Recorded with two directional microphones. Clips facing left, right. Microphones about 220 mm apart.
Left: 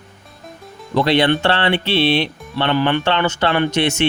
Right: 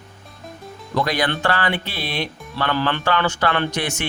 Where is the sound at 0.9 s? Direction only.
25° left (ahead or behind).